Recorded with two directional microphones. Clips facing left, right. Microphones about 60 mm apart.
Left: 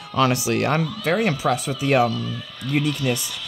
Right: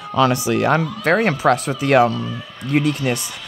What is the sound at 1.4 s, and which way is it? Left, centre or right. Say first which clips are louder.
Speech: right 5 dB; right.